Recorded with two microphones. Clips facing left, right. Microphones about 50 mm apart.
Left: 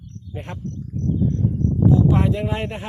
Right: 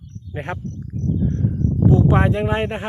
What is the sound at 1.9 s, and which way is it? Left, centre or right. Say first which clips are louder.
Speech: right 2 dB; right.